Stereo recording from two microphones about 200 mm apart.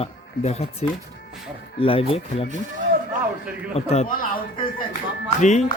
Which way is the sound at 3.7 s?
30° left (ahead or behind).